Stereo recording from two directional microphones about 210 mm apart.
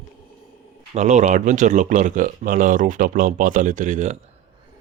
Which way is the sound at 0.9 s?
35° right (ahead or behind).